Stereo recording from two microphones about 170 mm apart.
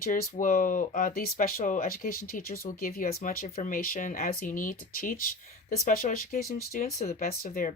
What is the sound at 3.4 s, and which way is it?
Speech, 40° left (ahead or behind).